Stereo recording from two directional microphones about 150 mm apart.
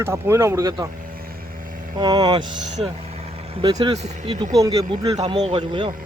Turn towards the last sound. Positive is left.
turn(degrees=-35)  # may be behind; listen again after turning